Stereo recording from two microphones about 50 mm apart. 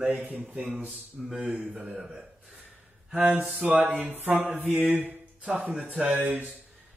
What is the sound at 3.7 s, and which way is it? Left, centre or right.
Speech, right.